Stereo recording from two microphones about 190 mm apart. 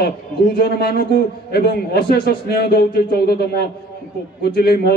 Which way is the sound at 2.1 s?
55° left (ahead or behind).